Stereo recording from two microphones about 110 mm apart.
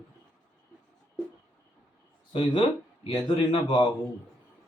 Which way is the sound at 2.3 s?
50° left (ahead or behind).